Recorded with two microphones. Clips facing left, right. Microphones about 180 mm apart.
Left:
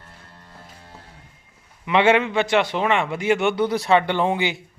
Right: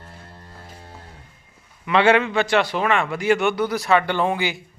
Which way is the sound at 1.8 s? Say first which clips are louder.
Even; 20° left (ahead or behind).